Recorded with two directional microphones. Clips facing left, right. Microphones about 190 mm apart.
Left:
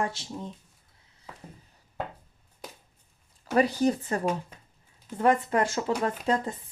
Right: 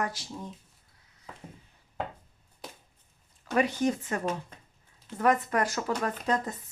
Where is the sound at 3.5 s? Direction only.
35° left (ahead or behind).